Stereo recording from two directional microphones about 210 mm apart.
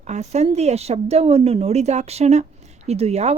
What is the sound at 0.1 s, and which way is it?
Speech, 30° right (ahead or behind).